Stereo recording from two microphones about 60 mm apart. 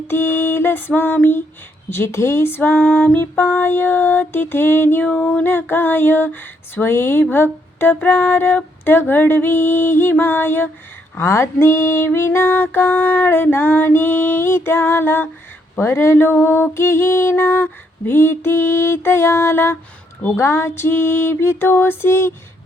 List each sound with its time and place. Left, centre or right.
0.1 s female singing: left
1.9 s female singing: left
5.0 s female singing: centre
11.2 s female singing: left